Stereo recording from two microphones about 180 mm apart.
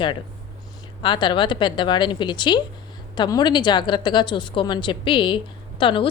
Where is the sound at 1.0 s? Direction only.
25° left (ahead or behind).